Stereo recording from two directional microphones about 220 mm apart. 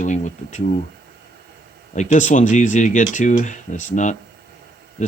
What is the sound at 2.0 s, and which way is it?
Speech, 35° left (ahead or behind).